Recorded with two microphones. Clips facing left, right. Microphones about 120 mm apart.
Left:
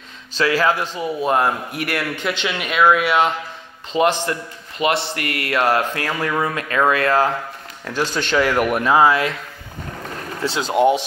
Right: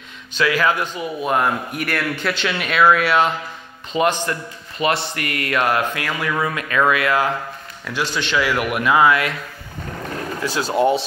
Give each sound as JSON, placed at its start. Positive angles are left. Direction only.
{"t": 0.4, "sound": "a man's voice", "side_deg": 30}
{"t": 10.4, "sound": "a man's voice", "side_deg": 25}